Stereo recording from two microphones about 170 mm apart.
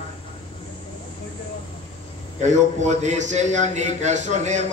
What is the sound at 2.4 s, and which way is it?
A man's voice, 45° right (ahead or behind).